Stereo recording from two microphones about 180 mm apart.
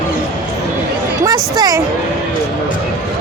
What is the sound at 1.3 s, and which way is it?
Speech, 20° right (ahead or behind).